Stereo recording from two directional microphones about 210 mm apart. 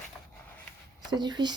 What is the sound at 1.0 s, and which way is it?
Speech, 20° right (ahead or behind).